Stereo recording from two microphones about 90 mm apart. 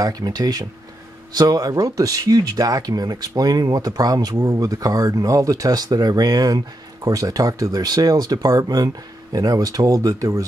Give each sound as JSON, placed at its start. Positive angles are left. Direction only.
{"t": 0.0, "sound": "speech", "side_deg": -45}